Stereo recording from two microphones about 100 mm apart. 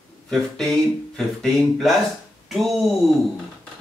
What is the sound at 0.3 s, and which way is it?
Speech, 5° left (ahead or behind).